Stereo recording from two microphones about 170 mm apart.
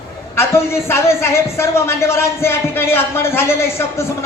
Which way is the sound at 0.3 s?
15° left (ahead or behind).